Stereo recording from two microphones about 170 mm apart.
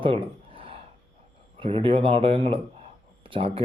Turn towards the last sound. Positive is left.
turn(degrees=-30)  # may be behind; listen again after turning